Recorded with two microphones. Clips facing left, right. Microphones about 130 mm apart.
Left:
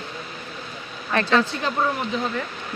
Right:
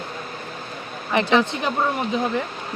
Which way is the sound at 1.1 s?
15° right (ahead or behind).